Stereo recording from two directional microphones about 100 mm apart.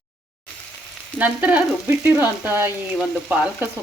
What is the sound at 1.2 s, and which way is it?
Frying, 15° right (ahead or behind).